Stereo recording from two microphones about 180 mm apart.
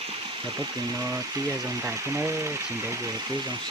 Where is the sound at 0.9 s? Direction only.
20° right (ahead or behind).